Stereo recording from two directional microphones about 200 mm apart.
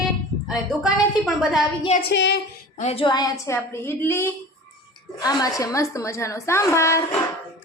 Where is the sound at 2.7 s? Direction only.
30° left (ahead or behind); by 7.2 s 15° left (ahead or behind).